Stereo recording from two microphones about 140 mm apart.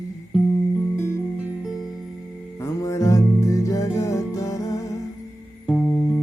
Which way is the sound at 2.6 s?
20° left (ahead or behind).